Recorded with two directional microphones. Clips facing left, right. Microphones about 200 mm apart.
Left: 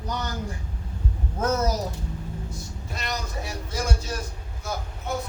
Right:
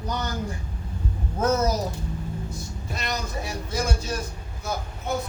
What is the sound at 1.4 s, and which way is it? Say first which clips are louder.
Speech: right 2 dB; 20° right (ahead or behind).